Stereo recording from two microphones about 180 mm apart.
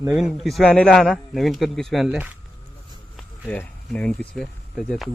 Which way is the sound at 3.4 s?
5° left (ahead or behind).